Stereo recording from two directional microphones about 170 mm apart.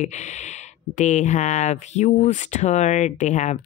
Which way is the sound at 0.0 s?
45° left (ahead or behind).